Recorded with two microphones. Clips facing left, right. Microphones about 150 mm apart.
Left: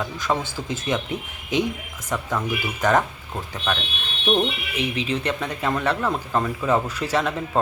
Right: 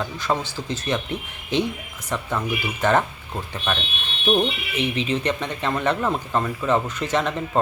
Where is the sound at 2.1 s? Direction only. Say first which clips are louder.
Even; centre (ahead or behind).